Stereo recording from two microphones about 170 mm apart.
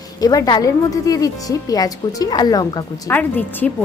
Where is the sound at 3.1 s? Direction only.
10° left (ahead or behind).